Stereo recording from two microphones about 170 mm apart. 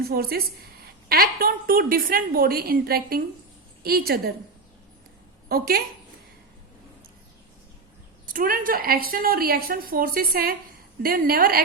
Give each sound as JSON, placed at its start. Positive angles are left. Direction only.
{"t": 0.1, "sound": "a woman's voice", "side_deg": -60}
{"t": 5.5, "sound": "a woman's voice", "side_deg": -65}
{"t": 8.3, "sound": "a woman's voice", "side_deg": -55}